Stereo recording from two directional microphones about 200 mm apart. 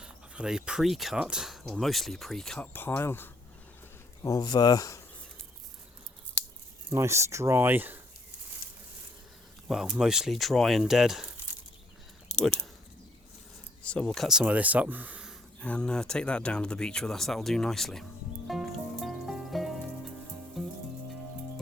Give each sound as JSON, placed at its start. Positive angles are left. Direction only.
{"t": 0.0, "sound": "speech", "side_deg": -5}
{"t": 6.9, "sound": "speech", "side_deg": -15}
{"t": 9.6, "sound": "speech", "side_deg": 0}
{"t": 12.4, "sound": "speech", "side_deg": 5}
{"t": 13.8, "sound": "speech", "side_deg": 5}
{"t": 15.6, "sound": "speech", "side_deg": 5}
{"t": 18.4, "sound": "music", "side_deg": 0}